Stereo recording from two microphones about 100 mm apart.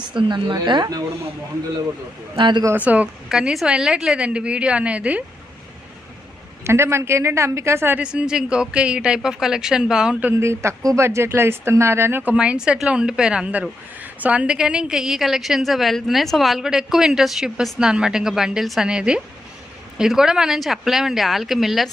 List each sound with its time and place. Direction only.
0.2 s speech: 55° right (ahead or behind)
2.3 s speech: 50° right (ahead or behind)
2.7 s speech: 15° right (ahead or behind)
6.7 s a woman's voice: 25° right (ahead or behind)
7.9 s speech: 10° right (ahead or behind)
10.3 s speech: 30° right (ahead or behind); by 21.9 s centre (ahead or behind)